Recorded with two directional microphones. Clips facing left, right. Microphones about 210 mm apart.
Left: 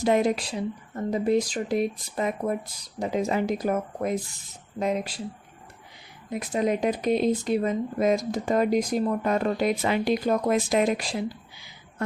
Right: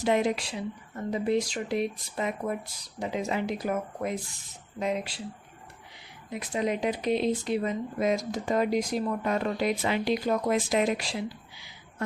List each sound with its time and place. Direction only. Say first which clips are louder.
0.0 s speech: left 3 dB; 40° left (ahead or behind)
6.5 s speech: left 4 dB; 45° left (ahead or behind)